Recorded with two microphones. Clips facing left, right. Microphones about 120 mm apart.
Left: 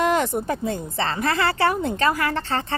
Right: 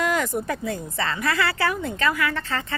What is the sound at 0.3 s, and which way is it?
A woman's voice, 25° left (ahead or behind).